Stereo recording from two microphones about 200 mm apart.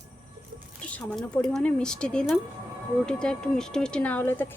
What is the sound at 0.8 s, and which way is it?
Speech, 5° left (ahead or behind).